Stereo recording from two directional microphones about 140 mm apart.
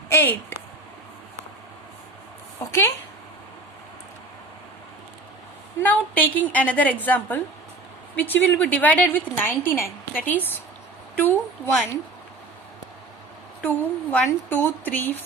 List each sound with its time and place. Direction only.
0.1 s speech: 15° left (ahead or behind)
2.6 s a woman's voice: 15° left (ahead or behind)
5.8 s a woman's voice: 10° left (ahead or behind)
13.6 s a woman's voice: 10° left (ahead or behind)